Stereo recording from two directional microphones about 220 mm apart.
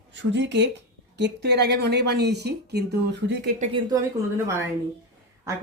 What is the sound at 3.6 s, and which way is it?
Speech, 25° right (ahead or behind).